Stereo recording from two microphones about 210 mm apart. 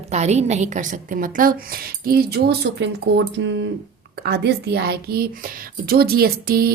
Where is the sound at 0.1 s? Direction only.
30° right (ahead or behind).